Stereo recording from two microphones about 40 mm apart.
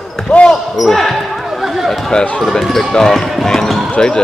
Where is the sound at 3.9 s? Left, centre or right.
Left.